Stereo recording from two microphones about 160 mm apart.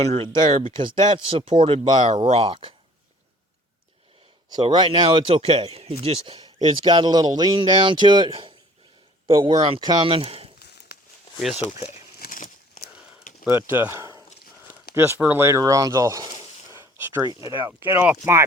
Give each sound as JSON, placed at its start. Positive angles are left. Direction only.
{"t": 0.0, "sound": "speech", "side_deg": -35}
{"t": 4.4, "sound": "speech", "side_deg": -25}
{"t": 10.9, "sound": "a sound", "side_deg": 90}
{"t": 11.5, "sound": "speech", "side_deg": 45}
{"t": 12.2, "sound": "a sound", "side_deg": 55}
{"t": 13.5, "sound": "speech", "side_deg": -15}